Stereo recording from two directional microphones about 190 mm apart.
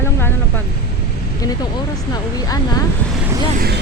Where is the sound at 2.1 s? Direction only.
20° left (ahead or behind).